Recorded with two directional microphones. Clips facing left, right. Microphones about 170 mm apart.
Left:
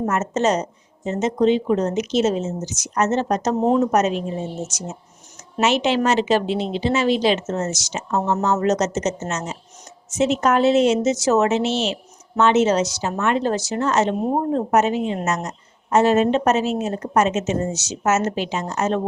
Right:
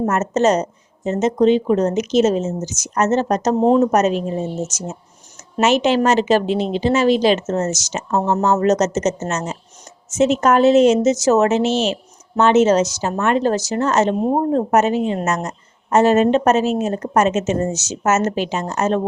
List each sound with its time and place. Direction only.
0.0 s speech: 45° right (ahead or behind)
3.6 s a woman's voice: 30° right (ahead or behind)
3.9 s speech: 45° right (ahead or behind)
5.5 s speech: 45° right (ahead or behind)